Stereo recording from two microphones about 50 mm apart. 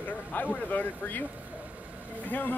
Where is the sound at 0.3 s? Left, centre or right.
Left.